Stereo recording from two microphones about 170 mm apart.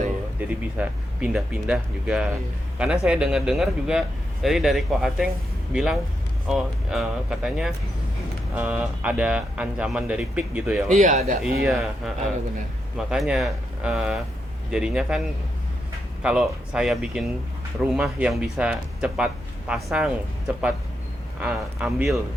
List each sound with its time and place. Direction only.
0.3 s speech: 10° right (ahead or behind)
10.9 s speech: 45° right (ahead or behind)
11.4 s speech: centre (ahead or behind)
16.2 s speech: 5° right (ahead or behind)
21.4 s speech: 5° right (ahead or behind)